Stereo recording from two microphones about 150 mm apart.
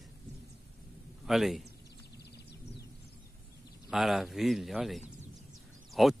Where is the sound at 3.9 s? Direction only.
Centre (ahead or behind).